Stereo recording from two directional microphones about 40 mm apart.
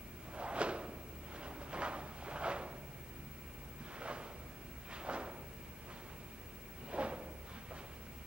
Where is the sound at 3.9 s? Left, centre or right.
Right.